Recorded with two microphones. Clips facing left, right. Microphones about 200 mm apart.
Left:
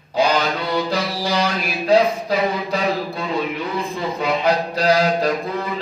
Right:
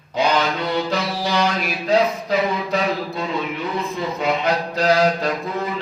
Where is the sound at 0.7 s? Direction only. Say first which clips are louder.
Left 1 dB; 35° left (ahead or behind).